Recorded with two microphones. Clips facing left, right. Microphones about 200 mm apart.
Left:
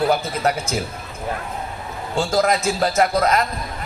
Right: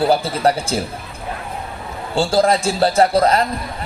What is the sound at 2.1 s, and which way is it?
A man's voice, 30° right (ahead or behind).